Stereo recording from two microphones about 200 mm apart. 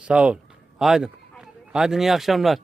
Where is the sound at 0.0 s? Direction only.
5° right (ahead or behind).